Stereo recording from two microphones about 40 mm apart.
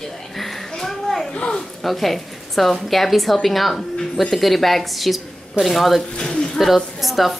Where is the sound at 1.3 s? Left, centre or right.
Left.